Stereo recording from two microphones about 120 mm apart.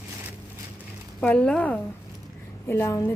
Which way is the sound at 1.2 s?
10° left (ahead or behind).